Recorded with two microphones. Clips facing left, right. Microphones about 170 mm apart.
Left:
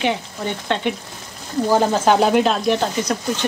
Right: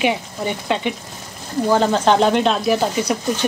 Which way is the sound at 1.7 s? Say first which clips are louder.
Even; 10° left (ahead or behind).